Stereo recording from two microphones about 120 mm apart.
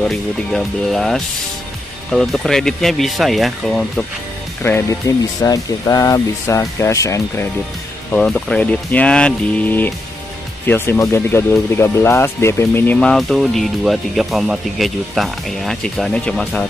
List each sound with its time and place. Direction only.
0.0 s speech: 5° left (ahead or behind)
5.4 s speech: 30° left (ahead or behind)
8.1 s speech: 5° left (ahead or behind)